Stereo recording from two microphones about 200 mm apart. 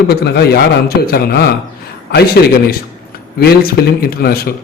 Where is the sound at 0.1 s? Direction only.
55° left (ahead or behind).